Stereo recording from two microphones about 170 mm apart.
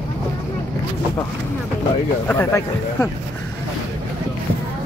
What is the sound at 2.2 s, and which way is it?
Speech, 10° left (ahead or behind).